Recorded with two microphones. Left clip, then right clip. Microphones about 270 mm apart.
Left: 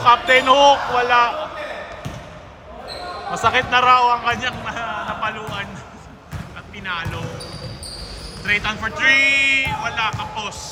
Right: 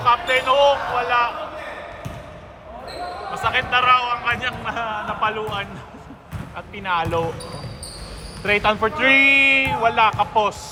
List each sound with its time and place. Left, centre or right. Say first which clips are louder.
0.0 s music: left 4 dB; left
3.3 s a man's voice: left 3 dB; left; by 5.6 s centre
6.8 s speech: right 5 dB; centre
8.4 s speech: right 2 dB; centre